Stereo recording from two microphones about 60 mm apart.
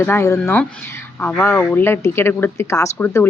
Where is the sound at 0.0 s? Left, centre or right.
Left.